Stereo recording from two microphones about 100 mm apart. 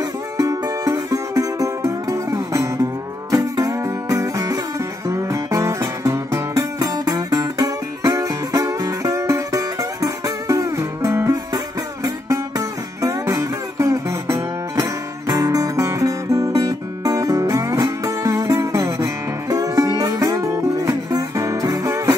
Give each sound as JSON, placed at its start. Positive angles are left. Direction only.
{"t": 0.4, "sound": "music", "side_deg": -35}
{"t": 11.5, "sound": "music", "side_deg": -40}